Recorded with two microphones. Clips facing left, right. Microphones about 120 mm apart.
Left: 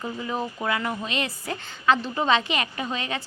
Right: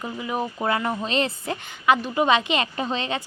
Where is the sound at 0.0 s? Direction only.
15° right (ahead or behind).